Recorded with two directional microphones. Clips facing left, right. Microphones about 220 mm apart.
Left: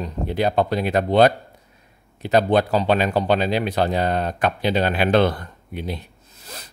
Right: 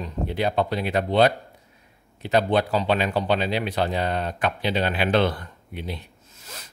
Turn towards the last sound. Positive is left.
turn(degrees=35)  # may be behind; listen again after turning